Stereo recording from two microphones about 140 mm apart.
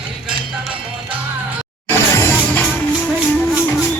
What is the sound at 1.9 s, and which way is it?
Music, 15° left (ahead or behind).